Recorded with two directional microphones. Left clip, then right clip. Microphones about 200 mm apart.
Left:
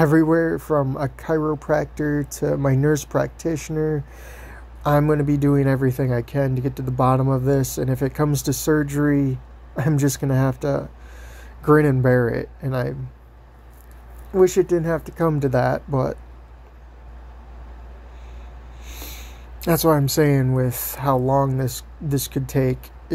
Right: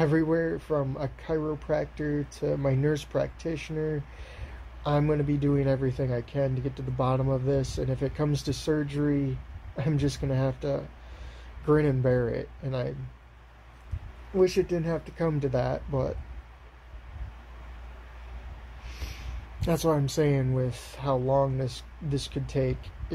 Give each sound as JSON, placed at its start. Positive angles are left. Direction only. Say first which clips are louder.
{"t": 0.3, "sound": "speech", "louder": "left 8 dB", "side_deg": 25}
{"t": 2.9, "sound": "speech", "louder": "left 7 dB", "side_deg": 30}
{"t": 10.0, "sound": "speech", "louder": "left 7 dB", "side_deg": 25}
{"t": 14.3, "sound": "speech", "louder": "left 8 dB", "side_deg": 10}
{"t": 15.3, "sound": "speech", "louder": "left 8 dB", "side_deg": 30}
{"t": 19.6, "sound": "speech", "louder": "left 8 dB", "side_deg": 30}